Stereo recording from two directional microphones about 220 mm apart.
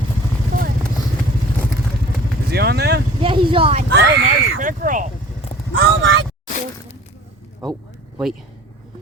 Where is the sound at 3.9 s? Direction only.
50° right (ahead or behind).